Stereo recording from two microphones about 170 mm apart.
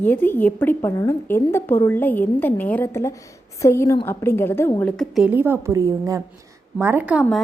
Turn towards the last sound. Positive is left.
turn(degrees=0)  # may be behind; listen again after turning